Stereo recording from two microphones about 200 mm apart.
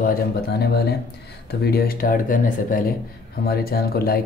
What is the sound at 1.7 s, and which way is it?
Speech, 45° left (ahead or behind).